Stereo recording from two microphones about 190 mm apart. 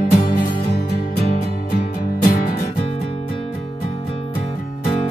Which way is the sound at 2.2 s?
50° left (ahead or behind).